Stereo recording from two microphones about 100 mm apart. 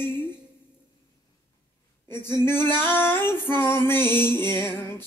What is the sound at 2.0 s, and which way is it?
Female singing, 25° left (ahead or behind).